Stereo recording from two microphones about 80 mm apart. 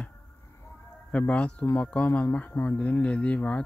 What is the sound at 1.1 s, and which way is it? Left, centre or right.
Speech, centre.